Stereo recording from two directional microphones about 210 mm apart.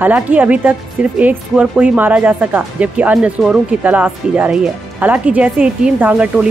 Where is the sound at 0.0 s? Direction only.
10° right (ahead or behind).